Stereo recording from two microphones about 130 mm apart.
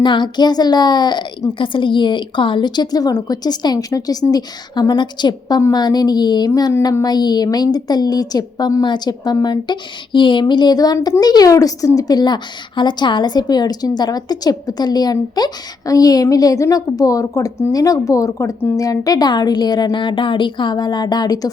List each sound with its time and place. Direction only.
0.0 s a woman's voice: 35° left (ahead or behind)